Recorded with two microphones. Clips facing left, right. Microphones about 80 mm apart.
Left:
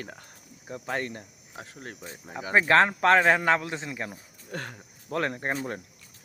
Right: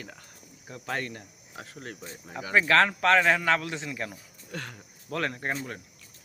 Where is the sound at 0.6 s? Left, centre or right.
Centre; by 4.7 s left.